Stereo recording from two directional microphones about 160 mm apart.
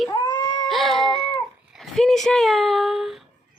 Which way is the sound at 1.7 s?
Centre (ahead or behind).